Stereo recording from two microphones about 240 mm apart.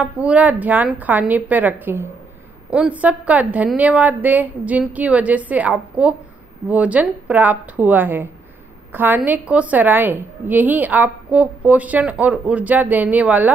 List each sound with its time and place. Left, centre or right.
0.0 s a woman's voice: centre